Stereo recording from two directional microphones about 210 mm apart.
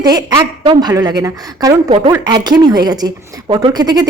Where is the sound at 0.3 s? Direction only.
20° right (ahead or behind).